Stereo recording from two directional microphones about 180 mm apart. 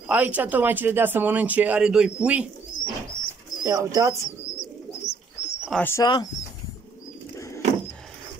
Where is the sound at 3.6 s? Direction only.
20° right (ahead or behind).